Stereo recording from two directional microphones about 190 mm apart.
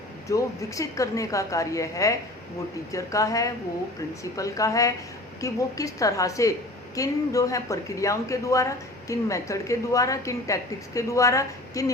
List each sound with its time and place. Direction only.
0.3 s speech: 15° left (ahead or behind)